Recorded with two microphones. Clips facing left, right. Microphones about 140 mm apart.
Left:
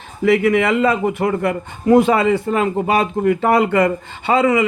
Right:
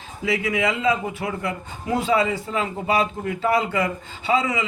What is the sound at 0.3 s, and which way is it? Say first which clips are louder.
A man's voice: left 8 dB; 55° left (ahead or behind).